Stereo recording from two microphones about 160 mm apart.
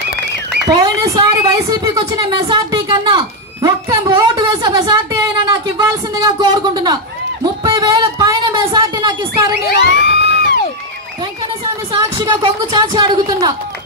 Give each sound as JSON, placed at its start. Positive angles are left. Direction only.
{"t": 0.7, "sound": "a woman's voice", "side_deg": -25}
{"t": 7.6, "sound": "music", "side_deg": -25}
{"t": 8.7, "sound": "a woman's voice", "side_deg": -25}
{"t": 9.7, "sound": "crowd", "side_deg": 90}
{"t": 11.9, "sound": "a woman's voice", "side_deg": -25}